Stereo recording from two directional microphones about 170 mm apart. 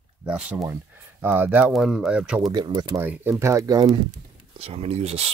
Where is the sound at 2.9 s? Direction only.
10° right (ahead or behind).